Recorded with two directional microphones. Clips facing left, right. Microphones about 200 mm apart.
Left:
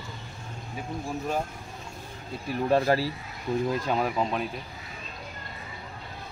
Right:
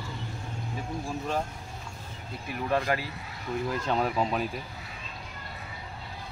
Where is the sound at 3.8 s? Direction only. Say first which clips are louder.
Left 1 dB; 5° left (ahead or behind).